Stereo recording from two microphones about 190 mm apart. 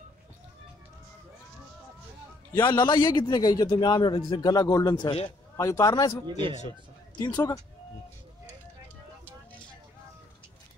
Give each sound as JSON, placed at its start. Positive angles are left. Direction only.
{"t": 2.6, "sound": "a man's voice", "side_deg": 20}